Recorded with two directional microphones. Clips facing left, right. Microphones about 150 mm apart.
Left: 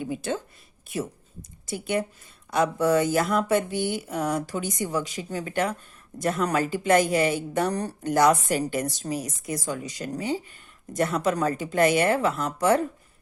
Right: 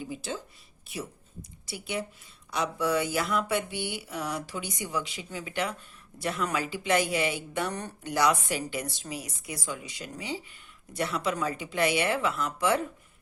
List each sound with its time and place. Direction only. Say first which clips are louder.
0.0 s speech: left 7 dB; 55° left (ahead or behind)